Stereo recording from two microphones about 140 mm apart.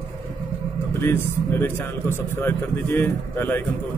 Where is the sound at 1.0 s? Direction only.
15° left (ahead or behind).